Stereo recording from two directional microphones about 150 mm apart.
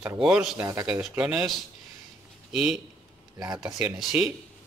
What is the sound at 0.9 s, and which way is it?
Speech, 5° right (ahead or behind).